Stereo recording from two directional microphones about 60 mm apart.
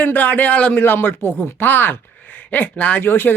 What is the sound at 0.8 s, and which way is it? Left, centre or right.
A woman's voice, left.